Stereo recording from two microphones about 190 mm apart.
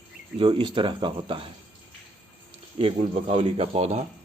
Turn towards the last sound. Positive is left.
turn(degrees=-35)  # may be behind; listen again after turning